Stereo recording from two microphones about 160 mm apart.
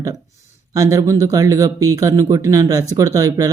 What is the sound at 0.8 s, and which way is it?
A man's voice, 20° right (ahead or behind).